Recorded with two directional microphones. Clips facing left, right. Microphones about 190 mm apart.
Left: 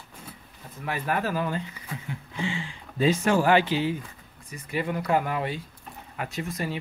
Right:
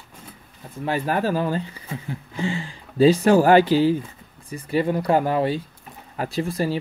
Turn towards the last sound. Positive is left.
turn(degrees=-30)  # may be behind; listen again after turning